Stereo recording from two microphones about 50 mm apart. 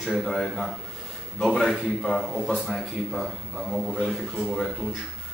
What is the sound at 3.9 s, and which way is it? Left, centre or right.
Speech, centre.